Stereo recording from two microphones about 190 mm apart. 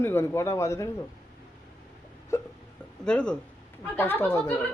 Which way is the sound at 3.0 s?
5° left (ahead or behind).